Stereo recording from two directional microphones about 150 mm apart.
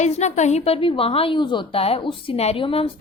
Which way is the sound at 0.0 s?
50° left (ahead or behind).